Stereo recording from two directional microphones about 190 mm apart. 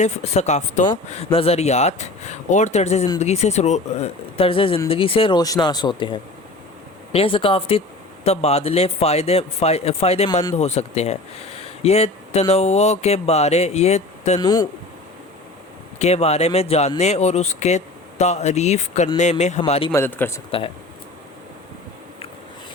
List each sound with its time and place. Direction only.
0.0 s speech: 40° left (ahead or behind)
14.3 s speech: 20° left (ahead or behind)
16.0 s speech: 35° left (ahead or behind)
19.9 s a man's voice: 10° left (ahead or behind)